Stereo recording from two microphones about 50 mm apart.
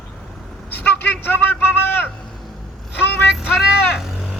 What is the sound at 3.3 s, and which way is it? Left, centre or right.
Vehicle, centre.